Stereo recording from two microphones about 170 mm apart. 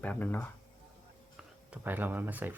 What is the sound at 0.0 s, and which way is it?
Speech, 10° left (ahead or behind).